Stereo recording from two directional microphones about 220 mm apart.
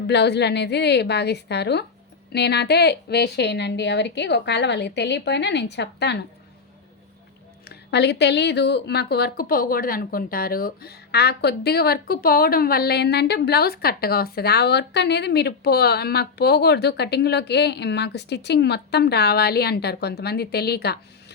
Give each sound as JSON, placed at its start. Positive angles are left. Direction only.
{"t": 0.1, "sound": "a woman's voice", "side_deg": 50}
{"t": 7.7, "sound": "a woman's voice", "side_deg": 50}